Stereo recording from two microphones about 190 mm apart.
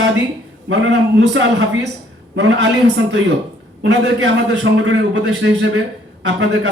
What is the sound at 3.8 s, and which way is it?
A man's voice, 75° right (ahead or behind).